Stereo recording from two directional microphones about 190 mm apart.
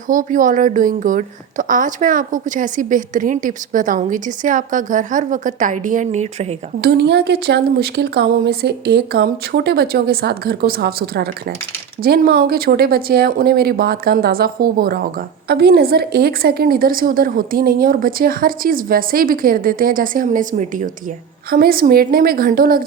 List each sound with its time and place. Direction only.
0.1 s a woman's voice: 45° right (ahead or behind)
6.8 s a woman's voice: 65° right (ahead or behind)